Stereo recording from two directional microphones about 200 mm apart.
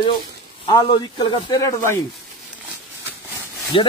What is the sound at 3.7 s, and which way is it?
Speech, 25° left (ahead or behind).